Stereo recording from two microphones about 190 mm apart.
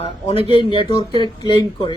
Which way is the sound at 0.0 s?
30° left (ahead or behind).